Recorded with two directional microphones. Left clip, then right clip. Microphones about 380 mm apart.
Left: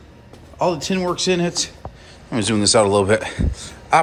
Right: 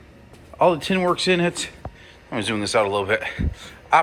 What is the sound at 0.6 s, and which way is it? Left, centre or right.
Speech, centre.